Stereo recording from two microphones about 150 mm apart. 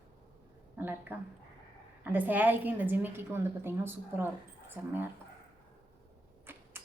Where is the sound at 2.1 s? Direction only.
10° right (ahead or behind).